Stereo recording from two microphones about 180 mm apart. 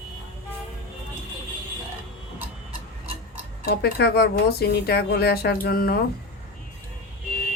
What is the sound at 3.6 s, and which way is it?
Speech, 65° left (ahead or behind).